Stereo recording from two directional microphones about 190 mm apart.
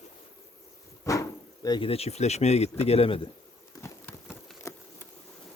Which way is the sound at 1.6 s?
25° left (ahead or behind).